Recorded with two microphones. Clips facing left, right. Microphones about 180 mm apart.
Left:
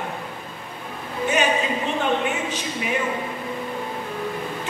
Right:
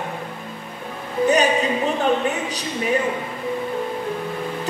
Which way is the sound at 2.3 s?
40° right (ahead or behind).